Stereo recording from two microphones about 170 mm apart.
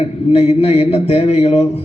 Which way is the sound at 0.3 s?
35° left (ahead or behind).